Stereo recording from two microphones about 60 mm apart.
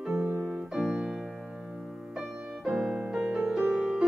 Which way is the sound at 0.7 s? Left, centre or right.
Centre.